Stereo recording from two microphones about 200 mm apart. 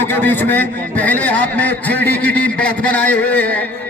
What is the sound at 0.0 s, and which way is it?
A man's voice, 10° left (ahead or behind).